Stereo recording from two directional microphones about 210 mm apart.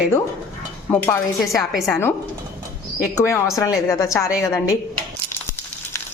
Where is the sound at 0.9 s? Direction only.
10° left (ahead or behind).